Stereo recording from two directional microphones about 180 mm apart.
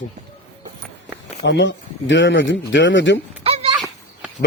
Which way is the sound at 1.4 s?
80° left.